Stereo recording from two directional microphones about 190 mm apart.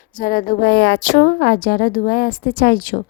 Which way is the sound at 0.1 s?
45° left (ahead or behind).